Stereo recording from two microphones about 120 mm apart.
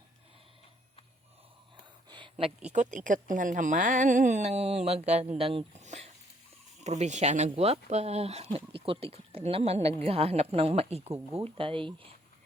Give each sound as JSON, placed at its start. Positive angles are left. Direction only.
{"t": 2.0, "sound": "a sound", "side_deg": -40}
{"t": 2.7, "sound": "a woman's voice", "side_deg": -90}
{"t": 5.3, "sound": "speech", "side_deg": -55}
{"t": 5.8, "sound": "a sound", "side_deg": -70}
{"t": 6.8, "sound": "speech", "side_deg": -70}
{"t": 11.5, "sound": "speech", "side_deg": -45}